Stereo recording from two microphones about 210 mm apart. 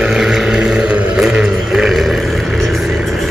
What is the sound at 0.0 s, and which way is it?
Vehicle, centre (ahead or behind).